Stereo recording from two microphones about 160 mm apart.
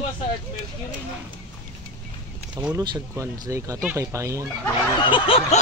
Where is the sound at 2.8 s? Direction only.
25° right (ahead or behind).